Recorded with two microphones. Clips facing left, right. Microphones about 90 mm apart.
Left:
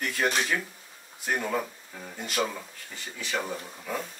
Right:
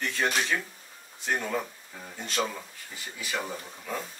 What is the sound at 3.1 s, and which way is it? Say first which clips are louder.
Speech: left 2 dB; 5° right (ahead or behind).